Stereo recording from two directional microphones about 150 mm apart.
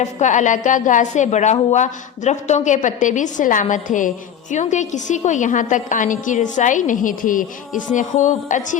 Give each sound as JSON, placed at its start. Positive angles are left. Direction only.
{"t": 0.0, "sound": "a woman's voice", "side_deg": 55}